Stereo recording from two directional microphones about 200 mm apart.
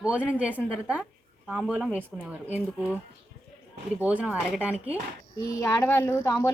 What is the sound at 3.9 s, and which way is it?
Speech, 5° right (ahead or behind).